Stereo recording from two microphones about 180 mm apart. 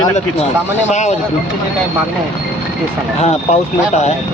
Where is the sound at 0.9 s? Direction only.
40° left (ahead or behind).